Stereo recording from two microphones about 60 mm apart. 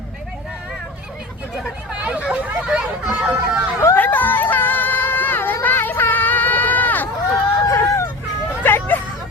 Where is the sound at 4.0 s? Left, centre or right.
Left.